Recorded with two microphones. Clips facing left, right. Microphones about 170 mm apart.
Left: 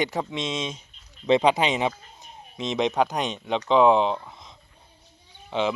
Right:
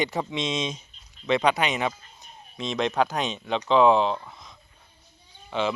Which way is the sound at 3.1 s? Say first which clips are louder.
Left 1 dB; 15° left (ahead or behind).